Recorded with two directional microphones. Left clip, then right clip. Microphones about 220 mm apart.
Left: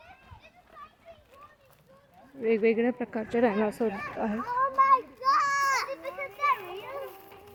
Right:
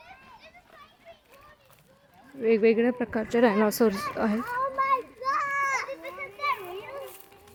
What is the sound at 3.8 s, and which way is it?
Speech, 25° right (ahead or behind).